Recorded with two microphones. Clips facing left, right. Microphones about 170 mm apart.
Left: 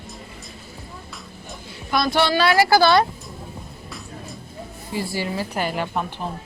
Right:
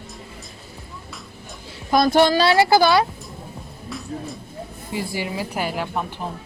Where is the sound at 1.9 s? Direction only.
45° right (ahead or behind).